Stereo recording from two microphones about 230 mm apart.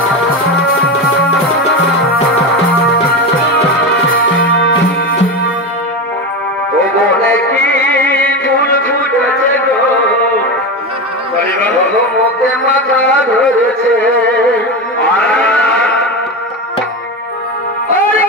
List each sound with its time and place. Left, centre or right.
4.1 s music: left
4.5 s music: left
7.2 s music: centre
12.4 s music: centre
15.2 s sheep: centre